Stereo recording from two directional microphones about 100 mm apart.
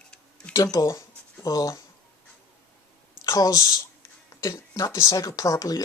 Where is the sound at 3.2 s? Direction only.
35° left (ahead or behind).